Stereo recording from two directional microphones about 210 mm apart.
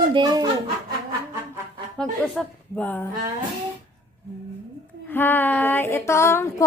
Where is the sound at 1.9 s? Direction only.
5° left (ahead or behind).